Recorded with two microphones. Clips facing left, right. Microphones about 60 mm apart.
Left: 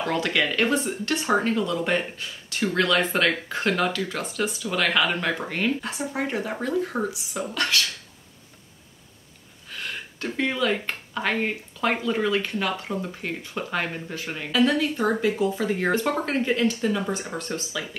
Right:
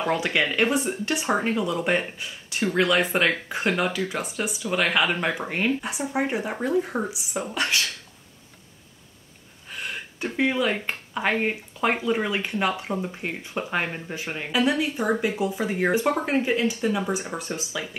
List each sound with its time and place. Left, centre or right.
0.0 s speech: centre
9.7 s speech: centre